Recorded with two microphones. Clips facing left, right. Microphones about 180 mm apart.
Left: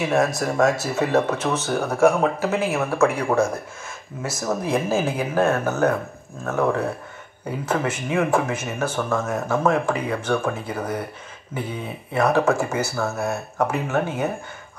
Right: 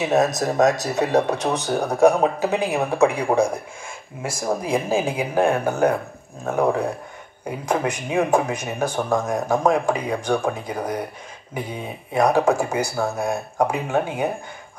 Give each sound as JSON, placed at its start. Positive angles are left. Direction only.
{"t": 0.0, "sound": "speech", "side_deg": -20}